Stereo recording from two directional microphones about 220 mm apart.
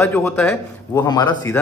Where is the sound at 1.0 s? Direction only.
20° left (ahead or behind).